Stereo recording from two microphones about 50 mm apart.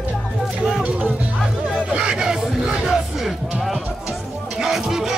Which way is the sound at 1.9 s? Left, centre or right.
Centre.